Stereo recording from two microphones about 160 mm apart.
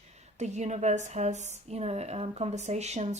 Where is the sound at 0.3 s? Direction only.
45° right (ahead or behind).